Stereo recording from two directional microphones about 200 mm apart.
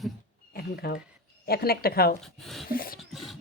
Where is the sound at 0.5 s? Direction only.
50° left (ahead or behind).